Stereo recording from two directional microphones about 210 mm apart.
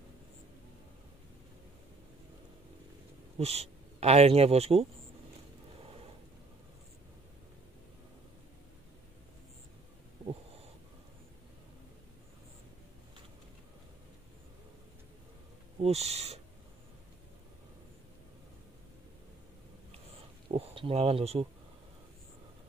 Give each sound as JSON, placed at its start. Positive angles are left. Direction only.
{"t": 3.3, "sound": "speech", "side_deg": -30}
{"t": 15.8, "sound": "speech", "side_deg": -30}
{"t": 20.5, "sound": "speech", "side_deg": -25}